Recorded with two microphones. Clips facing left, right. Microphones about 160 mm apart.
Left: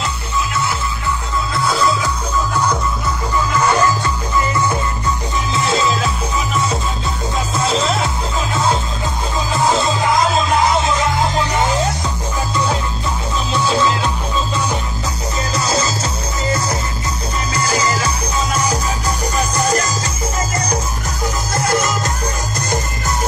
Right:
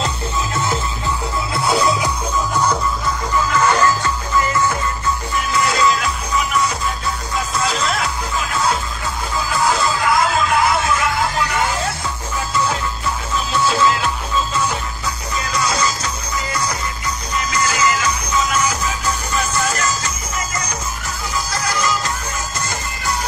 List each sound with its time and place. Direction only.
1.5 s music: 25° right (ahead or behind)
3.5 s music: 15° left (ahead or behind)
5.5 s music: 25° left (ahead or behind)
13.5 s music: 20° left (ahead or behind)
15.3 s music: 30° left (ahead or behind)
17.5 s music: 35° left (ahead or behind)
21.5 s music: 50° left (ahead or behind)